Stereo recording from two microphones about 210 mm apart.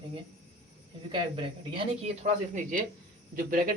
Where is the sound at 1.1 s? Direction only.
25° right (ahead or behind).